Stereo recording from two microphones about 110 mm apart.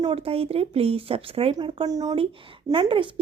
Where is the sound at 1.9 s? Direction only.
35° right (ahead or behind).